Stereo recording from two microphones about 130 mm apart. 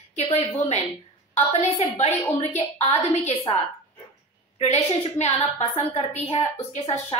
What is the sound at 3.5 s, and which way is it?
Speech, 45° left (ahead or behind).